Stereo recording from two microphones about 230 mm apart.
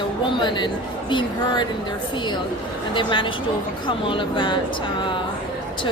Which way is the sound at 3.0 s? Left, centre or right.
Left.